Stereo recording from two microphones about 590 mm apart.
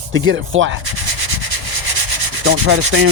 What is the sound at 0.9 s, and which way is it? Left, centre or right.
Rub, right.